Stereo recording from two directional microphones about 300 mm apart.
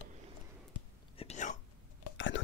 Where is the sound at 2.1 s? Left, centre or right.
Left.